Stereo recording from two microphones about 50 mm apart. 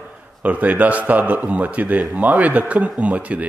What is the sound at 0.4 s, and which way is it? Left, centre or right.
A man's voice, right.